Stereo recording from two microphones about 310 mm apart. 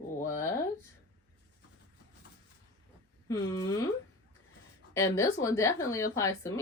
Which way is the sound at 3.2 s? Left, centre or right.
Centre.